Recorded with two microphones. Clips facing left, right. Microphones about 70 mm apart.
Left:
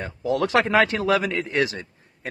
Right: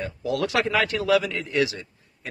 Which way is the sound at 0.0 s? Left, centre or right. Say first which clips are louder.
Left 2 dB; left.